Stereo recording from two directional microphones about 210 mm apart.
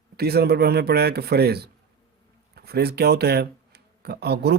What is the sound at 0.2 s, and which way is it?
Speech, 50° right (ahead or behind).